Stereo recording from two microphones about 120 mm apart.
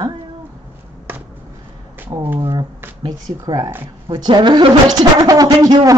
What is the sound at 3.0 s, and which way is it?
Speech, 35° right (ahead or behind).